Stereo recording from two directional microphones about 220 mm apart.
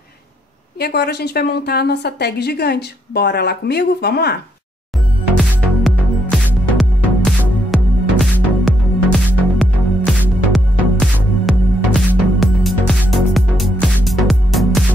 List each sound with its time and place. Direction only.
0.7 s a woman's voice: 45° left (ahead or behind)
5.4 s music: centre (ahead or behind)